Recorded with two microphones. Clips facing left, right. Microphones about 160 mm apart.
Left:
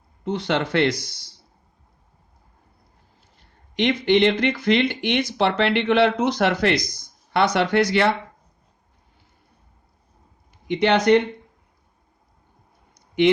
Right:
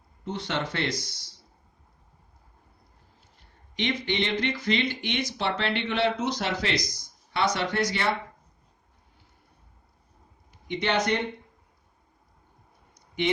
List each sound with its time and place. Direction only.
0.3 s speech: 80° left
3.8 s speech: 65° left (ahead or behind)
10.7 s speech: 90° left
12.9 s a sound: 80° left